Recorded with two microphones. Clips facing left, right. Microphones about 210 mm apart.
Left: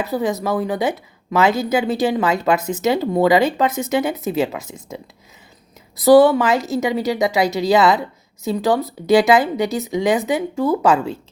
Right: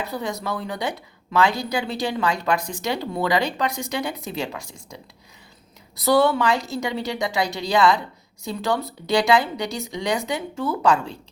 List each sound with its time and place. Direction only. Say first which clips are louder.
0.2 s speech: left 8 dB; 20° left (ahead or behind)
6.2 s speech: left 5 dB; 20° left (ahead or behind)